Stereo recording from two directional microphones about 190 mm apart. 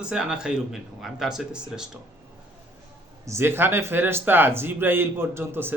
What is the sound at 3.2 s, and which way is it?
Speech, 15° right (ahead or behind).